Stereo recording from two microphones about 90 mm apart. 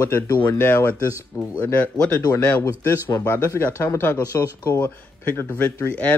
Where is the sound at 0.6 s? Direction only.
25° left (ahead or behind).